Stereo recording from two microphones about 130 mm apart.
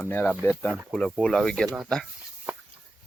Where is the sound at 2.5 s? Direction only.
10° right (ahead or behind).